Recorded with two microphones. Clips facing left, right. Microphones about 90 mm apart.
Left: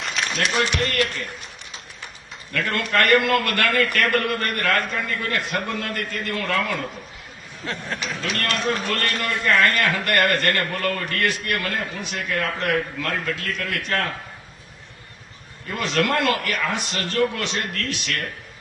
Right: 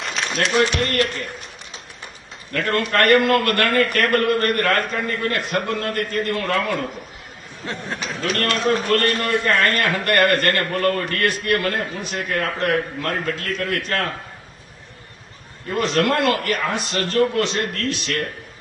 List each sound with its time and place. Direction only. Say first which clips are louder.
0.1 s a man's voice: right 3 dB; 35° right (ahead or behind)
2.5 s a man's voice: right 3 dB; 40° right (ahead or behind)
7.9 s a man's voice: right 5 dB; 40° right (ahead or behind)
15.7 s a man's voice: right 3 dB; 35° right (ahead or behind)